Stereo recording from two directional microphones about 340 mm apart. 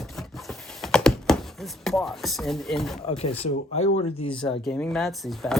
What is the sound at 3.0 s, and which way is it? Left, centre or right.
Speech, centre.